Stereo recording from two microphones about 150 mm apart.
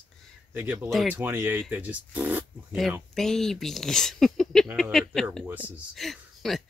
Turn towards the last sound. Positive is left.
turn(degrees=0)  # may be behind; listen again after turning